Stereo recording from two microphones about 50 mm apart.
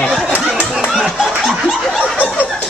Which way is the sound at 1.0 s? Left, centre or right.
Centre.